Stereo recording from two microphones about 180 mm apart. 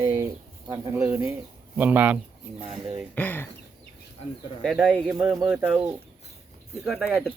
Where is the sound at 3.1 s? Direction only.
10° left (ahead or behind).